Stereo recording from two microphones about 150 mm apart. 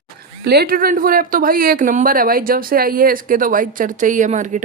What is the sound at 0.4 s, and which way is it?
Speech, 90° right.